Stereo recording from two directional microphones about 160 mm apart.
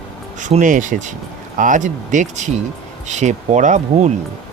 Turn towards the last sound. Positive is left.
turn(degrees=-50)  # may be behind; listen again after turning